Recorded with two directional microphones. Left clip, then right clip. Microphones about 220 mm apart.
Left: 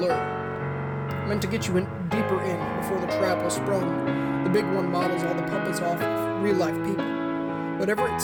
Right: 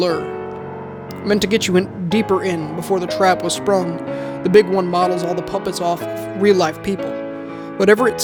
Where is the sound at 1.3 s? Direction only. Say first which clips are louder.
Right 12 dB; 45° right (ahead or behind).